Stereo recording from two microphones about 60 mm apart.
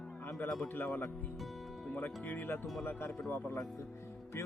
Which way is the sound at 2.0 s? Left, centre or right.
Left.